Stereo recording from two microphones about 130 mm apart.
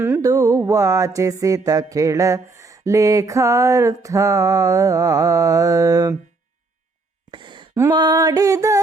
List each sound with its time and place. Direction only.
0.0 s music: 25° right (ahead or behind)
7.3 s a sound: 35° right (ahead or behind)
7.8 s music: 30° right (ahead or behind)